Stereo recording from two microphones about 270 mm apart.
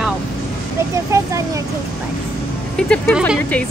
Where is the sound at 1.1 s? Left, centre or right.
Centre.